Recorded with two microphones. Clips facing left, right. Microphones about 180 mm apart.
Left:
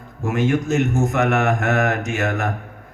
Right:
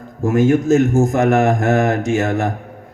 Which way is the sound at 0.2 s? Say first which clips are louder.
Right 6 dB; 40° right (ahead or behind).